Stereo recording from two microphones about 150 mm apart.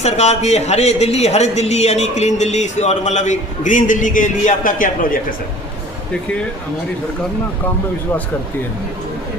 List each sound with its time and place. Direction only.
0.0 s speech: 45° left (ahead or behind); by 5.2 s 65° left (ahead or behind)